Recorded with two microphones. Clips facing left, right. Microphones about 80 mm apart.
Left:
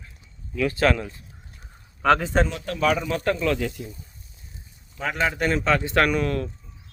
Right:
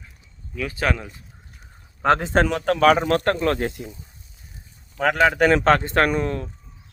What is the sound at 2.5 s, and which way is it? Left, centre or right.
Speech, right.